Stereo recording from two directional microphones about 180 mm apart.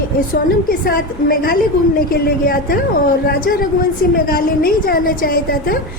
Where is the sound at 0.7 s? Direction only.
55° left (ahead or behind).